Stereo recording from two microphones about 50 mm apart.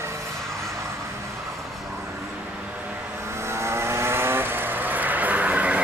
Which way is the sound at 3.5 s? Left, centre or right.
Right.